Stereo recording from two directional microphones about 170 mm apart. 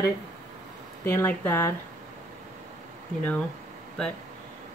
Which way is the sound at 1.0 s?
15° left (ahead or behind).